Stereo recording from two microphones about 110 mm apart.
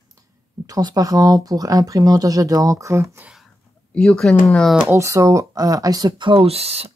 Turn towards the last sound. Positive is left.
turn(degrees=-65)  # may be behind; listen again after turning